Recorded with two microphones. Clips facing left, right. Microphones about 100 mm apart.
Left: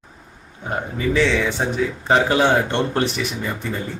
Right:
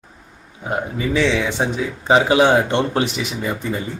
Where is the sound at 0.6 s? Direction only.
10° right (ahead or behind).